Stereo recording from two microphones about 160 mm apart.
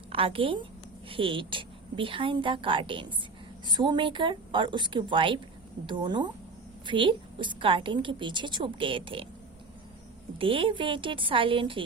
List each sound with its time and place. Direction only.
0.1 s a woman's voice: 35° right (ahead or behind)
10.3 s a woman's voice: 35° right (ahead or behind)